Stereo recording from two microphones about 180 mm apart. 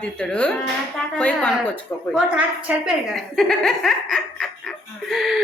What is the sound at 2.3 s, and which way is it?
Speech, 5° right (ahead or behind).